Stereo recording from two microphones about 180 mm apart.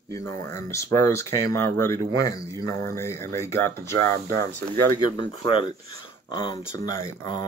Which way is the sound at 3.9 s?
60° right (ahead or behind).